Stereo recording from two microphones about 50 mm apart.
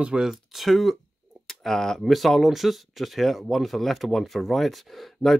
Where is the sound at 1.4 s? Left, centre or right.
Centre.